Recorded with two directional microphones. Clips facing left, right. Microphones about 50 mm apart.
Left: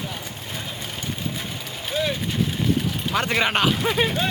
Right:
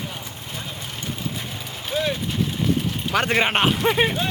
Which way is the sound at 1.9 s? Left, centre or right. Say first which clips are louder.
Right 1 dB; centre.